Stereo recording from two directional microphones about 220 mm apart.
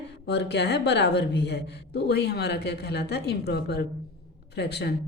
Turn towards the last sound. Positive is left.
turn(degrees=50)  # may be behind; listen again after turning